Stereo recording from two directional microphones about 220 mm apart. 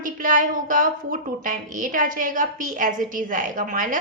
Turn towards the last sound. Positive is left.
turn(degrees=-35)  # may be behind; listen again after turning